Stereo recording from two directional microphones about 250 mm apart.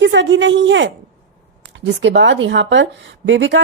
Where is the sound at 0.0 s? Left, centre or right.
Right.